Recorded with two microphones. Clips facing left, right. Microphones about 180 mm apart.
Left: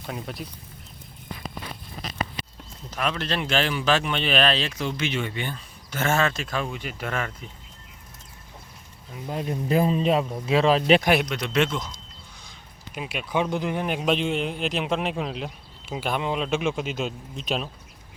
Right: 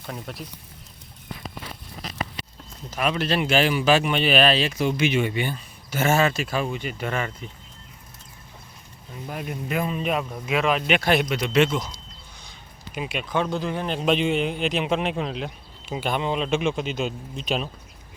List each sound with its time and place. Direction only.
0.0 s a man's voice: centre (ahead or behind)
2.9 s speech: 5° right (ahead or behind)
9.2 s speech: 25° left (ahead or behind)
11.2 s a man's voice: 5° right (ahead or behind)
12.5 s a sound: centre (ahead or behind)
13.3 s speech: 15° left (ahead or behind)
14.0 s a man's voice: centre (ahead or behind)